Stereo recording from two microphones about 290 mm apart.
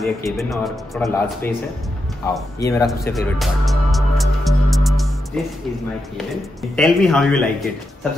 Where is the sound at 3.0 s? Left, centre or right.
Centre.